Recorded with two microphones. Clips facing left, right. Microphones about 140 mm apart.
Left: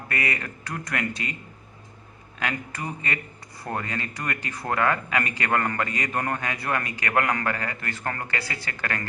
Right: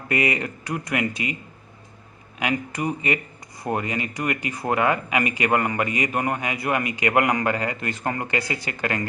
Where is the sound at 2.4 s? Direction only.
15° right (ahead or behind).